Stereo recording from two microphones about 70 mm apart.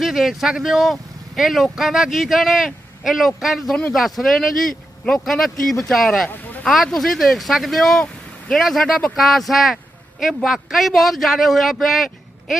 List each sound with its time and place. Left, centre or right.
0.0 s speech: centre
6.2 s a sound: left
6.7 s speech: centre